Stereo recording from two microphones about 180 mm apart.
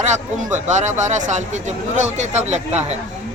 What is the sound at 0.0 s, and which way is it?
Speech, 40° right (ahead or behind).